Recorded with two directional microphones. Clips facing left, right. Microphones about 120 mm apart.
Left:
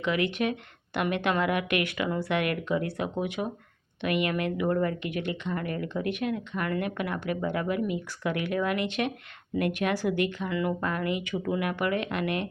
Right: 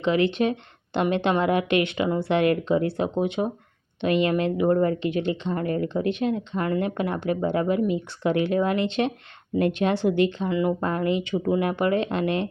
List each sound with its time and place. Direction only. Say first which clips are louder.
0.0 s speech: right 6 dB; 30° right (ahead or behind)